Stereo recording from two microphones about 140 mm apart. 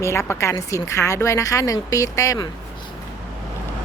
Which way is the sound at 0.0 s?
20° left (ahead or behind).